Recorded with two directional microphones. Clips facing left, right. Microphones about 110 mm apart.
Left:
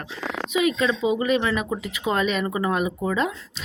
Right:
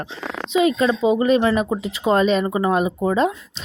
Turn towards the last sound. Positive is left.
turn(degrees=-30)  # may be behind; listen again after turning